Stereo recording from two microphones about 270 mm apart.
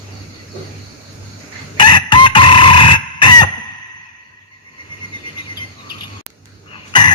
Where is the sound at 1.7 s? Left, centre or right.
Centre.